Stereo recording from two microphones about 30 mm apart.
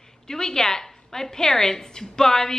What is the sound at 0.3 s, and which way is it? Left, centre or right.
A woman's voice, left.